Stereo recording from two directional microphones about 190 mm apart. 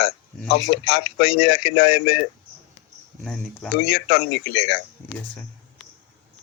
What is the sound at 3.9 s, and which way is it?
Speech, 50° left (ahead or behind).